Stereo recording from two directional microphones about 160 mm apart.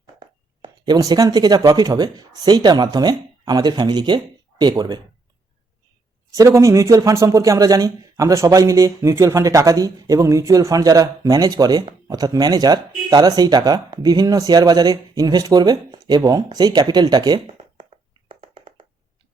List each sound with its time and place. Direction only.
0.2 s speech: 25° right (ahead or behind)
6.3 s speech: 20° right (ahead or behind)
18.3 s a sound: 35° right (ahead or behind)